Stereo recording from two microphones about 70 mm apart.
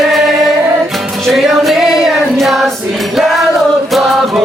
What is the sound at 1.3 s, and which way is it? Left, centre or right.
Music, centre.